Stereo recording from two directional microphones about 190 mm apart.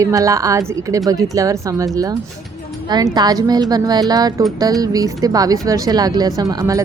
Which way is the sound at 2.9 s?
20° right (ahead or behind).